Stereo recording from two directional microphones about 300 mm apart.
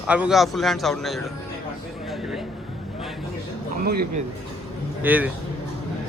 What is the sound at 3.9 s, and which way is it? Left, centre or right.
Speech, right.